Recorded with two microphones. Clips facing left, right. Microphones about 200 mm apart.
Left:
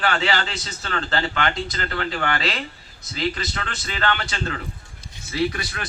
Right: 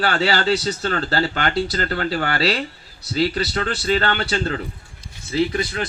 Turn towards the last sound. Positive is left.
turn(degrees=-25)  # may be behind; listen again after turning